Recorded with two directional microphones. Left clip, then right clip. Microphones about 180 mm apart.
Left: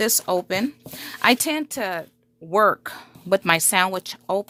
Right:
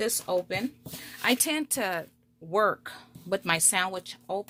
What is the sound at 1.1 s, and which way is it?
Speech, 35° left (ahead or behind).